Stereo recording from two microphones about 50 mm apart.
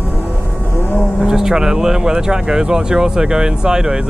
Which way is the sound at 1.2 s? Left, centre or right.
Centre.